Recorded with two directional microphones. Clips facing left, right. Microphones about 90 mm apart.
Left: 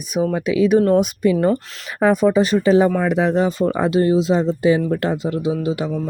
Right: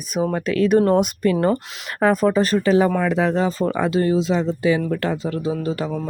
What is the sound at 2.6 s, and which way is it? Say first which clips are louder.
Speech: left 3 dB; 30° left (ahead or behind).